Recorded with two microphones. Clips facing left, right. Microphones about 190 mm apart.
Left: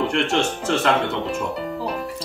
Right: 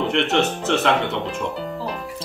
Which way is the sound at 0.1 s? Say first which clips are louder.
Right 1 dB; centre (ahead or behind).